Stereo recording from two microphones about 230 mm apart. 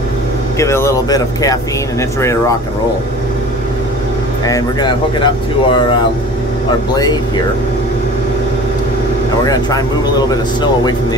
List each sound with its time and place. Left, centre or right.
0.6 s speech: centre
4.5 s speech: centre
7.0 s speech: centre
9.5 s speech: centre